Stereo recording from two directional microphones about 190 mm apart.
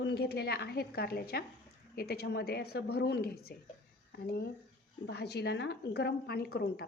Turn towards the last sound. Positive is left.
turn(degrees=55)  # may be behind; listen again after turning